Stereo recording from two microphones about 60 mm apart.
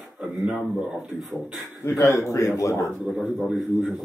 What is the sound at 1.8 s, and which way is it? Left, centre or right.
A man's voice, left.